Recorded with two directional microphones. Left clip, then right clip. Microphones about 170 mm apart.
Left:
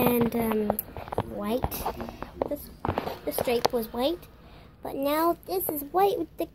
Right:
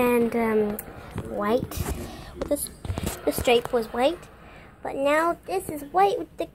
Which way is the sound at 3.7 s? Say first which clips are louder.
Right 5 dB; 15° left (ahead or behind).